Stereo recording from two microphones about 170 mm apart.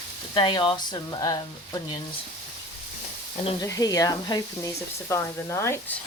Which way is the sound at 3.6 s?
20° left (ahead or behind).